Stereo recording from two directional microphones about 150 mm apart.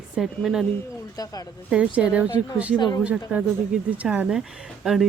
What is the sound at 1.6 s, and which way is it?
Speech, 10° right (ahead or behind).